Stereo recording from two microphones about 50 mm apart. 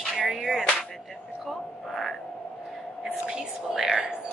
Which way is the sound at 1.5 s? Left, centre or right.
Centre.